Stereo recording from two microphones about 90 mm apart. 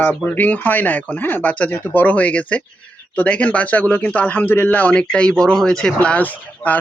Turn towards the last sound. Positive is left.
turn(degrees=15)  # may be behind; listen again after turning